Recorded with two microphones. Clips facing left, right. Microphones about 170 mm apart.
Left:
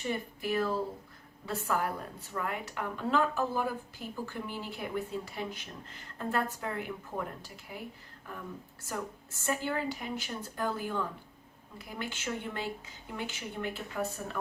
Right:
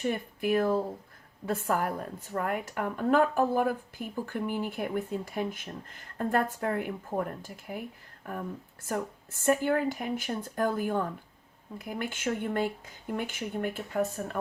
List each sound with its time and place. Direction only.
0.0 s a woman's voice: 50° right (ahead or behind)
8.9 s a woman's voice: 55° right (ahead or behind)